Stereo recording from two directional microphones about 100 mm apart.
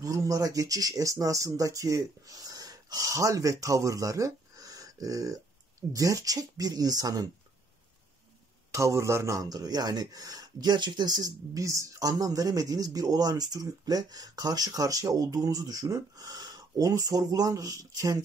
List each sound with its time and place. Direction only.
0.0 s speech: 35° right (ahead or behind)
8.7 s speech: 30° right (ahead or behind)